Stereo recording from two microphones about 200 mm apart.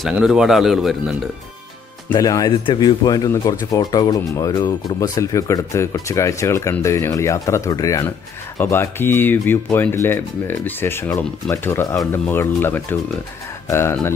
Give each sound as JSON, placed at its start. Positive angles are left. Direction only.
{"t": 0.0, "sound": "speech", "side_deg": -5}
{"t": 2.1, "sound": "speech", "side_deg": 20}